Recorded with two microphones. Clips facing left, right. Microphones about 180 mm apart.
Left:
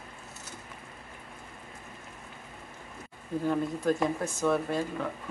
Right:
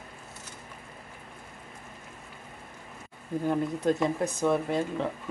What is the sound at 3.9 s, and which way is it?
Speech, 20° right (ahead or behind).